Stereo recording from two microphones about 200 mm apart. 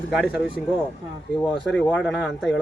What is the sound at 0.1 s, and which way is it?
Speech, 5° right (ahead or behind).